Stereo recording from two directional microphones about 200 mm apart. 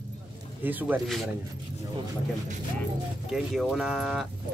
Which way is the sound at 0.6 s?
10° right (ahead or behind).